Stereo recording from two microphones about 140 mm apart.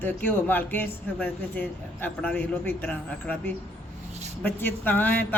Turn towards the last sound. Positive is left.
turn(degrees=10)  # may be behind; listen again after turning